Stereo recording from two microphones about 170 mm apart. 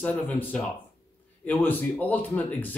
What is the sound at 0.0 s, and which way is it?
Speech, 10° left (ahead or behind).